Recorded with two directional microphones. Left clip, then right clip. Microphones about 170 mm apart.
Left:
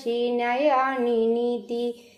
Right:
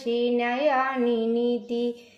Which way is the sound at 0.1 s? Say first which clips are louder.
Even; 30° left (ahead or behind).